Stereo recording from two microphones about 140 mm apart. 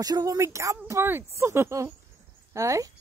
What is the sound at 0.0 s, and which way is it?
Speech, 25° right (ahead or behind).